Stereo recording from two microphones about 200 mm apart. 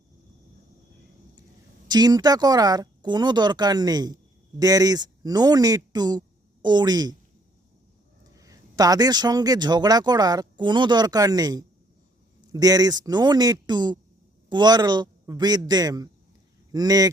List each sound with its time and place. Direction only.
1.9 s speech: 20° right (ahead or behind)
8.4 s speech: 15° right (ahead or behind)